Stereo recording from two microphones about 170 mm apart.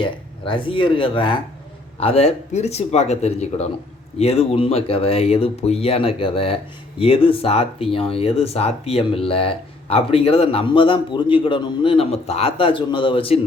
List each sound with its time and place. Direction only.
0.0 s speech: 30° left (ahead or behind)